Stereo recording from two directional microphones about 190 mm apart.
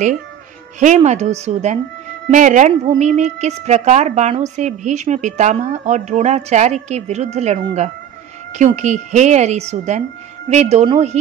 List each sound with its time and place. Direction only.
0.7 s a woman's voice: 40° right (ahead or behind)